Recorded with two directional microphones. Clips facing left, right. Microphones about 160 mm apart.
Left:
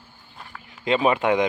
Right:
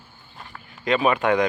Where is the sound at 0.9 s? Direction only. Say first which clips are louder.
Even; 25° left (ahead or behind).